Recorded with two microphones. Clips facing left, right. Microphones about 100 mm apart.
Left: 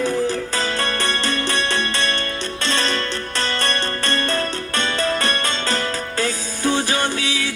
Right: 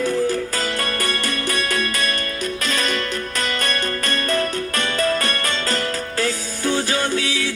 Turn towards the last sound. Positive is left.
turn(degrees=25)  # may be behind; listen again after turning